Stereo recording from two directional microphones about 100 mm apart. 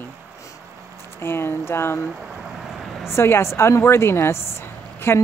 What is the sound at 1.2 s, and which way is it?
Speech, 25° left (ahead or behind).